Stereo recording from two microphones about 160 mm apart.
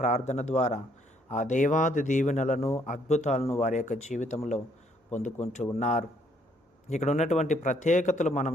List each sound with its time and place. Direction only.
0.0 s a man's voice: 45° left (ahead or behind)